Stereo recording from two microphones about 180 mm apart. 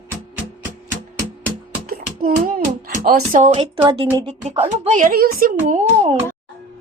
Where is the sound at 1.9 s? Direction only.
50° right (ahead or behind).